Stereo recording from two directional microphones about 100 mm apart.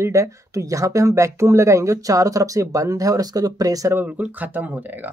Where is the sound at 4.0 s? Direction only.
15° right (ahead or behind).